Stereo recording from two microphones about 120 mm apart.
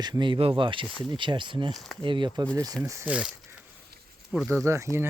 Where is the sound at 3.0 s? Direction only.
10° right (ahead or behind).